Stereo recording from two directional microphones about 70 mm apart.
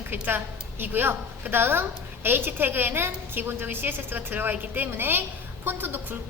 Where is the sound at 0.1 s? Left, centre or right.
Right.